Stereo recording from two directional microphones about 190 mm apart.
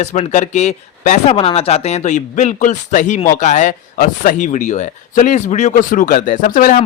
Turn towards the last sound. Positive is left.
turn(degrees=45)  # may be behind; listen again after turning